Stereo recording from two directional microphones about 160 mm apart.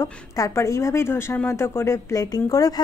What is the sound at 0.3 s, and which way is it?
A woman's voice, 20° left (ahead or behind).